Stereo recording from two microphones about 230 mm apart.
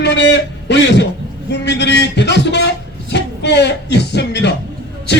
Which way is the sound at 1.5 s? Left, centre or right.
Left.